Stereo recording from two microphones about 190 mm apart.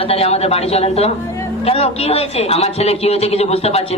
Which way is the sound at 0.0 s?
30° left (ahead or behind).